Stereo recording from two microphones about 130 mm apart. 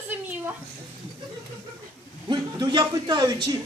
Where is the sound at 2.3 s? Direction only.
35° right (ahead or behind).